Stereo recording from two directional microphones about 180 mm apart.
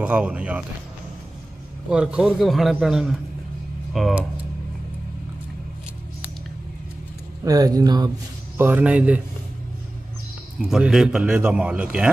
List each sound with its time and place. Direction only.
0.0 s a man's voice: 5° right (ahead or behind)
1.9 s a man's voice: 5° right (ahead or behind)
7.4 s speech: 20° right (ahead or behind)
8.5 s speech: 10° right (ahead or behind)
10.7 s a man's voice: centre (ahead or behind)